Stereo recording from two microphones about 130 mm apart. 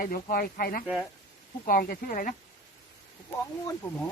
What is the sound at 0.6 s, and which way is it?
Speech, 90° left.